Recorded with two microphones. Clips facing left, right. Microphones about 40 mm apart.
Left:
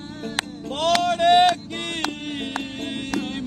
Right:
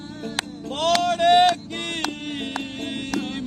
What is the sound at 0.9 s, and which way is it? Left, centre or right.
Vehicle, centre.